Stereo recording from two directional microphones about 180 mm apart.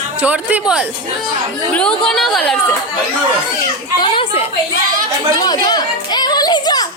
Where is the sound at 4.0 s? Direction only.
30° left (ahead or behind).